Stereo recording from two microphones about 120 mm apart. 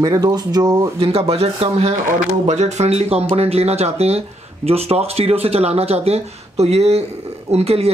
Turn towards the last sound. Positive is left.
turn(degrees=-60)  # may be behind; listen again after turning